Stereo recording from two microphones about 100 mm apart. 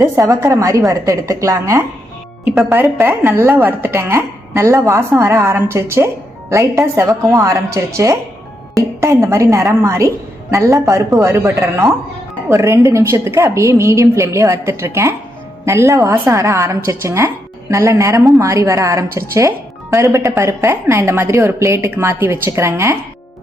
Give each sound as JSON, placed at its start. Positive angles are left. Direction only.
{"t": 0.0, "sound": "a woman's voice", "side_deg": -35}